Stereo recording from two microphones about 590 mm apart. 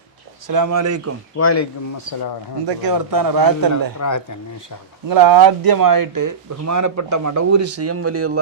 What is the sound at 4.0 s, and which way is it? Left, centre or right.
Speech, left.